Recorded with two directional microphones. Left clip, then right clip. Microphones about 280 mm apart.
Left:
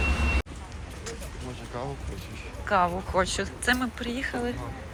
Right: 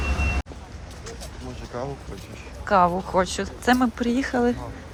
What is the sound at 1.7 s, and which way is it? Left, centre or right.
Speech, right.